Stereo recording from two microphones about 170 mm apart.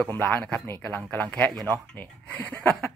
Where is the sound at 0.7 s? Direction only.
10° left (ahead or behind).